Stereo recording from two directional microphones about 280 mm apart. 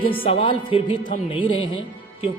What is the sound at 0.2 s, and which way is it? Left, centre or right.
Speech, left.